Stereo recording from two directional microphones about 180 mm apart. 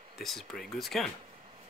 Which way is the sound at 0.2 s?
Centre (ahead or behind).